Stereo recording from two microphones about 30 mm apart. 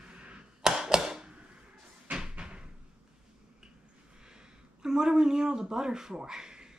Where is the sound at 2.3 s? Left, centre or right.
Right.